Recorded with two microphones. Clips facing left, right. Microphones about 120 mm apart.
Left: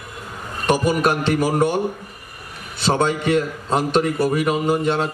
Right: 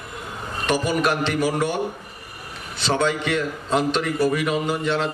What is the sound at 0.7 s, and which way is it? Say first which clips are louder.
A man's voice: left 3 dB; 45° left (ahead or behind).